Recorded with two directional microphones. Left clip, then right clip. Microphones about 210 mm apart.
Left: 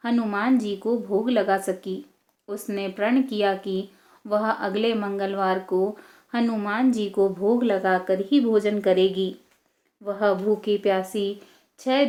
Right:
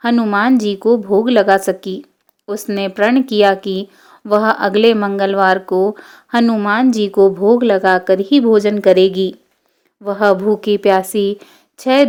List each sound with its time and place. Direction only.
0.0 s speech: 45° right (ahead or behind)